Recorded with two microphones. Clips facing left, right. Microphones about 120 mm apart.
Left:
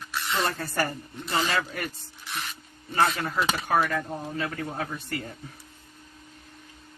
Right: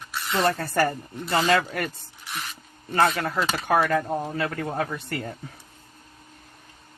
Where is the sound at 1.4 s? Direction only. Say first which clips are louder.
Right 6 dB; 45° right (ahead or behind).